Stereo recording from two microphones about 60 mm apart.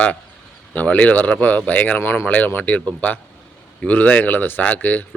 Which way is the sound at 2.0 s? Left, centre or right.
Left.